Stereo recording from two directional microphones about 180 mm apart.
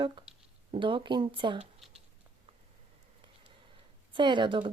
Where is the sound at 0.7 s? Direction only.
25° right (ahead or behind).